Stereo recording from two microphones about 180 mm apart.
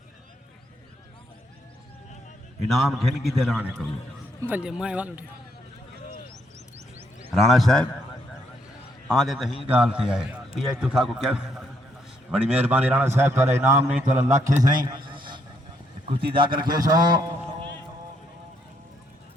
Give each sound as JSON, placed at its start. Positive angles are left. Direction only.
{"t": 2.6, "sound": "a man's voice", "side_deg": 0}
{"t": 6.7, "sound": "a sound", "side_deg": -35}
{"t": 7.3, "sound": "a man's voice", "side_deg": 0}
{"t": 9.0, "sound": "a man's voice", "side_deg": 0}
{"t": 14.3, "sound": "a man's voice", "side_deg": -45}
{"t": 14.8, "sound": "a sound", "side_deg": -25}
{"t": 16.0, "sound": "a man's voice", "side_deg": -30}